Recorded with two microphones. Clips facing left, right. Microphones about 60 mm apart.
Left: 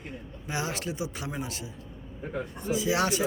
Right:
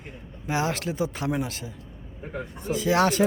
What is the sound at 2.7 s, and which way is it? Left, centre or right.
Speech, right.